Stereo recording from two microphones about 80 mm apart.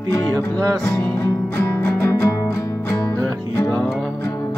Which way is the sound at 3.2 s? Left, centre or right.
Right.